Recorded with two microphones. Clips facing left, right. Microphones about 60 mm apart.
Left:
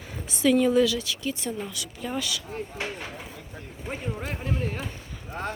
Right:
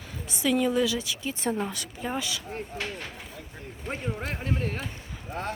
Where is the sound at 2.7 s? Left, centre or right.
Centre.